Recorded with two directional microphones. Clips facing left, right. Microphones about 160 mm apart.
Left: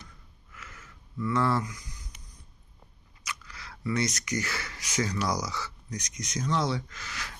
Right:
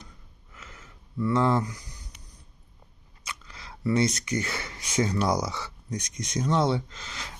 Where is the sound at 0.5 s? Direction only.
25° right (ahead or behind).